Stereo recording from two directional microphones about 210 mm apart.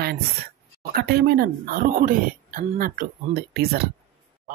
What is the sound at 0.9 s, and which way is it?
Speech, 50° right (ahead or behind).